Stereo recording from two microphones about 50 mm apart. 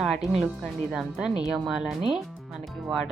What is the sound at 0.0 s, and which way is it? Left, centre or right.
Speech, centre.